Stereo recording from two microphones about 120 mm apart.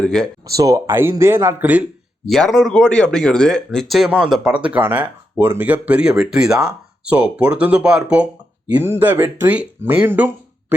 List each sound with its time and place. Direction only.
0.0 s speech: 5° left (ahead or behind)
0.6 s speech: 25° right (ahead or behind)
2.2 s speech: centre (ahead or behind); by 10.8 s 15° right (ahead or behind)